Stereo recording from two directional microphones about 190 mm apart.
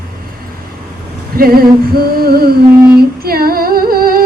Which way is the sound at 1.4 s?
50° right (ahead or behind).